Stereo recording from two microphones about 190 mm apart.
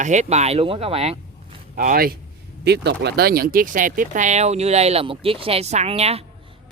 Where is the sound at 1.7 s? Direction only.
50° right (ahead or behind).